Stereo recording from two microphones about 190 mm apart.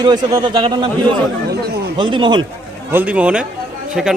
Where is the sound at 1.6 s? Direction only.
60° right (ahead or behind).